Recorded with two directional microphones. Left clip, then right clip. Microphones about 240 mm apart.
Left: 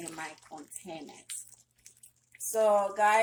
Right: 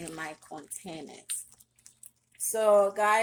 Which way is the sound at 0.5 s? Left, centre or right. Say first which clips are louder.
Right 3 dB; right.